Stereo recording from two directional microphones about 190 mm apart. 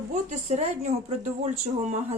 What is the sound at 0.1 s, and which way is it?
A woman's voice, 35° right (ahead or behind).